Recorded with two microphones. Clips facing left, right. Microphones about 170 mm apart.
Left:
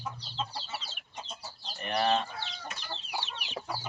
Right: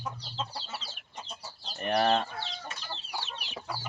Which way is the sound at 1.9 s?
45° right (ahead or behind).